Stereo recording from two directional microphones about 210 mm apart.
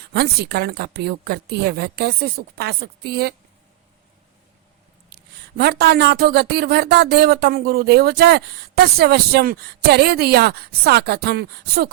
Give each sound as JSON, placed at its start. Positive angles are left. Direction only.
{"t": 0.1, "sound": "speech", "side_deg": -50}
{"t": 5.1, "sound": "speech", "side_deg": -50}